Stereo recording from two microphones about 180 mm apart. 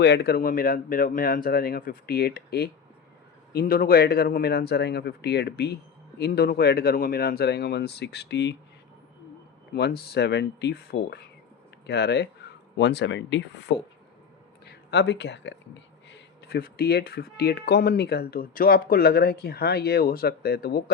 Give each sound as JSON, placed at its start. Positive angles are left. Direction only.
{"t": 0.0, "sound": "speech", "side_deg": 65}
{"t": 9.7, "sound": "speech", "side_deg": 65}